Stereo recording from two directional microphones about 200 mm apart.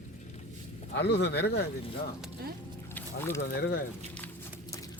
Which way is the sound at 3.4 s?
55° left (ahead or behind).